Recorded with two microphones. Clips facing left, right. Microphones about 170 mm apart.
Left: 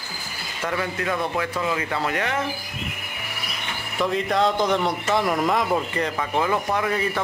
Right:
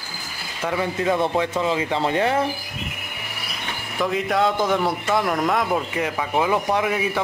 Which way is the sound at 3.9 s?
Centre (ahead or behind).